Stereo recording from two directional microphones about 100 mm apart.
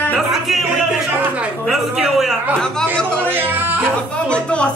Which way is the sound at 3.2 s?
20° right (ahead or behind).